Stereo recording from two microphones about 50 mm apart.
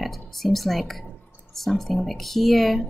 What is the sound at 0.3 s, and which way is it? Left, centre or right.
A woman's voice, centre.